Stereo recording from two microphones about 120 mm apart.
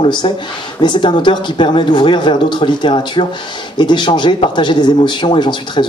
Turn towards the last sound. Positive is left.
turn(degrees=40)  # may be behind; listen again after turning